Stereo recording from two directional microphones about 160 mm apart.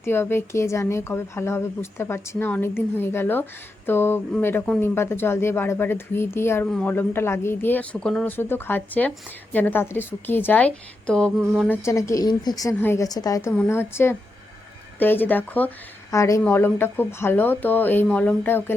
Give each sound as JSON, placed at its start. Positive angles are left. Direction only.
{"t": 0.0, "sound": "speech", "side_deg": 15}
{"t": 11.0, "sound": "mantra", "side_deg": 5}
{"t": 11.7, "sound": "a woman's voice", "side_deg": 20}
{"t": 13.5, "sound": "a woman's voice", "side_deg": 10}